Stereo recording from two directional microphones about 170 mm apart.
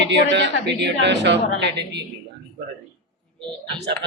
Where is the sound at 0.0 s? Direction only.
90° right.